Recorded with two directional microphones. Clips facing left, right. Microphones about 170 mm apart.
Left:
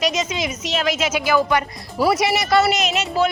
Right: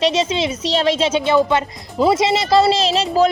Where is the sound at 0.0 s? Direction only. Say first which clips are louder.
Right 5 dB; 30° right (ahead or behind).